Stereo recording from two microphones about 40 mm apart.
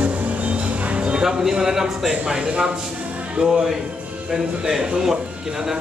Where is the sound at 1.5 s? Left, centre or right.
Centre.